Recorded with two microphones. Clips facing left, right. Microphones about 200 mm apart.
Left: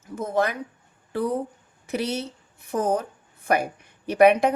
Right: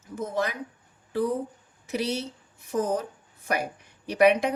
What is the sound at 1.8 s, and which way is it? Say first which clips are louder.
A woman's voice: left 2 dB; 55° left (ahead or behind).